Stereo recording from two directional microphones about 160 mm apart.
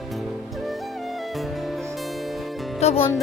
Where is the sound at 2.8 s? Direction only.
40° left (ahead or behind).